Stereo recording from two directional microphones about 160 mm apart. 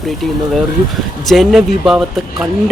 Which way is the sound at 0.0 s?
Centre (ahead or behind).